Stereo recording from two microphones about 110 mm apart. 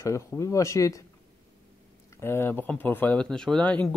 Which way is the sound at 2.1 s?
20° left (ahead or behind).